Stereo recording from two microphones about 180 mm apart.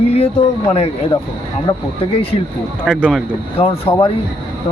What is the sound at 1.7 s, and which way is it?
Speech, 25° left (ahead or behind).